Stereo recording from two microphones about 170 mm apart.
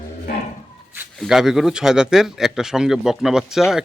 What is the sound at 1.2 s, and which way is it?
Speech, 5° right (ahead or behind).